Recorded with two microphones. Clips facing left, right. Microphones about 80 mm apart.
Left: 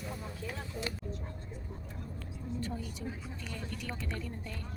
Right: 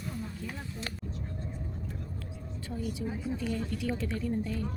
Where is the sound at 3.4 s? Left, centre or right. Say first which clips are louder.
Right 7 dB; centre.